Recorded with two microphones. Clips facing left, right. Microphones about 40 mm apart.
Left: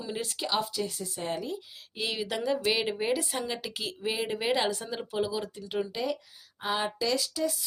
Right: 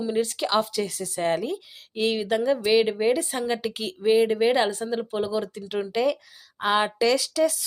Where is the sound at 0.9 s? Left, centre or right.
Right.